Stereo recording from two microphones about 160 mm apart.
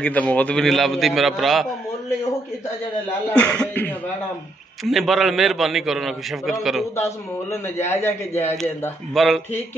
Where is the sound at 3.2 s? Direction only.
10° left (ahead or behind).